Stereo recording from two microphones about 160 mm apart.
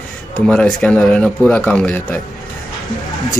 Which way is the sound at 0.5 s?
5° left (ahead or behind).